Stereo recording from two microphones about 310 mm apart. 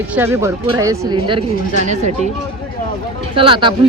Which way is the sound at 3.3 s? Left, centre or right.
Centre.